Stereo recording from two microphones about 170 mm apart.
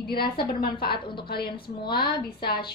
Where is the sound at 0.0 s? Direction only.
65° left (ahead or behind).